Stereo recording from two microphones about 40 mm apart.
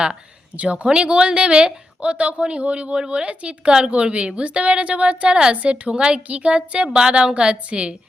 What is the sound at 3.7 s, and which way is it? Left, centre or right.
A woman's voice, centre.